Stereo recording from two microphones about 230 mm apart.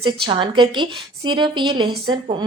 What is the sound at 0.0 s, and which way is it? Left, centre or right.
A woman's voice, right.